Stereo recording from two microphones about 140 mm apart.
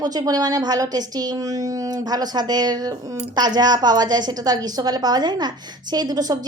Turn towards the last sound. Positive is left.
turn(degrees=-25)  # may be behind; listen again after turning